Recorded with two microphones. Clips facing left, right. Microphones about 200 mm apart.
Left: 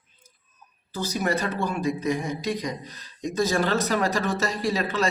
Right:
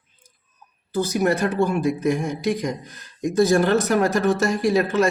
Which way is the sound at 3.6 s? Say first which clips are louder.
Right 5 dB; 55° right (ahead or behind).